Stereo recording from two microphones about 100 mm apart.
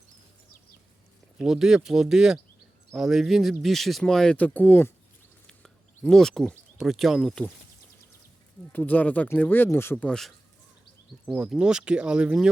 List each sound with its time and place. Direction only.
1.4 s speech: 5° right (ahead or behind); by 4.9 s 15° left (ahead or behind)
5.5 s a sound: 5° left (ahead or behind)
6.7 s speech: centre (ahead or behind)
8.7 s speech: 15° left (ahead or behind)
10.1 s speech: 5° left (ahead or behind)
11.3 s speech: 10° right (ahead or behind)